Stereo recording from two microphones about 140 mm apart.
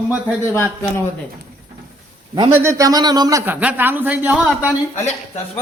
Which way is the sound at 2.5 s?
20° right (ahead or behind).